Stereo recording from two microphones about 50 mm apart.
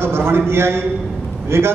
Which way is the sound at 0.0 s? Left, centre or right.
Right.